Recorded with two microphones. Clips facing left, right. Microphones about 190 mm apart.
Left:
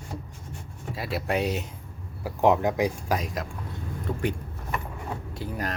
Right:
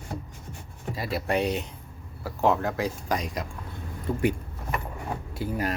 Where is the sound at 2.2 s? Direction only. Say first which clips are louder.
Left 3 dB; 15° left (ahead or behind).